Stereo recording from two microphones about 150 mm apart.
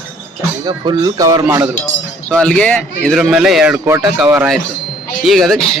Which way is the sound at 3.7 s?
20° right (ahead or behind).